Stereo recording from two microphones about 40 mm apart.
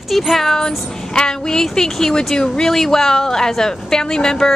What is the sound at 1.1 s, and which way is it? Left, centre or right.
A woman's voice, centre.